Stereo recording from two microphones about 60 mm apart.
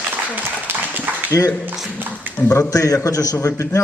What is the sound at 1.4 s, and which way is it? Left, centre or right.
Speech, left.